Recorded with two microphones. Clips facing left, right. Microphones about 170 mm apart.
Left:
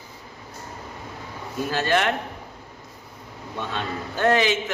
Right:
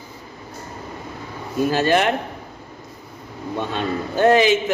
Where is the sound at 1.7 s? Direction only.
10° right (ahead or behind).